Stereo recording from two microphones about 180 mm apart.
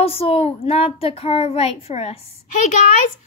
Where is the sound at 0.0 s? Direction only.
30° left (ahead or behind).